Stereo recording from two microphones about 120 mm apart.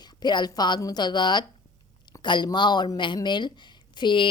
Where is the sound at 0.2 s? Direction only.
35° left (ahead or behind).